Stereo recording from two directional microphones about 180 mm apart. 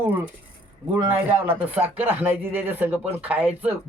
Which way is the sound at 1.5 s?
10° right (ahead or behind).